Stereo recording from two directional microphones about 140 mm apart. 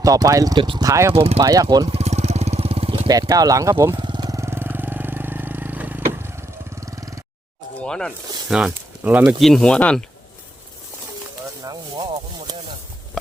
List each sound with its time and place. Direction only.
0.0 s speech: 25° right (ahead or behind)
0.9 s speech: 20° right (ahead or behind)
1.1 s speech: 45° right (ahead or behind)
1.4 s speech: 25° right (ahead or behind)
1.9 s vehicle: 50° right (ahead or behind)
3.1 s speech: 25° right (ahead or behind)
3.9 s vehicle: 35° right (ahead or behind)
7.9 s speech: 5° left (ahead or behind)
8.4 s speech: 5° right (ahead or behind)
9.4 s speech: 5° left (ahead or behind)
11.6 s speech: 25° right (ahead or behind)